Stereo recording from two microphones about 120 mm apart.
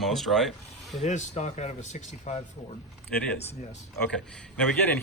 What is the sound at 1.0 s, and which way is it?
Speech, 75° left (ahead or behind).